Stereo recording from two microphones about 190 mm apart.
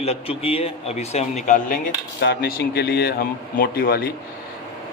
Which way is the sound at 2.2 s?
55° left (ahead or behind).